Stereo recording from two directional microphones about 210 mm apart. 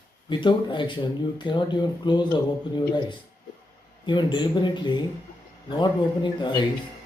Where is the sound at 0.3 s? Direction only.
20° left (ahead or behind).